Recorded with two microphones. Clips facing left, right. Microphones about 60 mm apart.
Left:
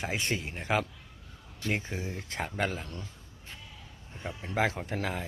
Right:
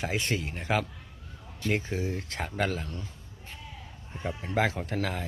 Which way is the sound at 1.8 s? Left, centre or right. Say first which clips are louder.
Right 5 dB; left.